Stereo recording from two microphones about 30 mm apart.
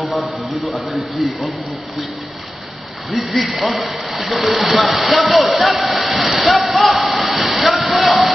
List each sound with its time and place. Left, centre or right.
0.0 s speech: centre
3.3 s speech: centre
6.4 s a sound: centre